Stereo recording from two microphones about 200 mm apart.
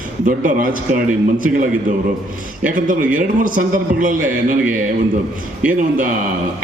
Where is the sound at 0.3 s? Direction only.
40° right (ahead or behind).